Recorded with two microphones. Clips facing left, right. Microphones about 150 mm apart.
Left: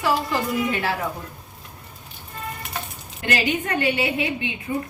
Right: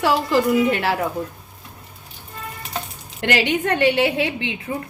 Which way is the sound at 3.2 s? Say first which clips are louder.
Right 4 dB; 80° right.